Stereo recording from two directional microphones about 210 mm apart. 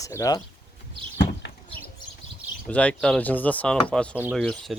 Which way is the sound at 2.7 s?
5° left (ahead or behind).